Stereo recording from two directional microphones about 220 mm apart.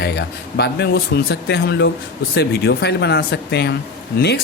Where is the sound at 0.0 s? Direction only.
50° left (ahead or behind).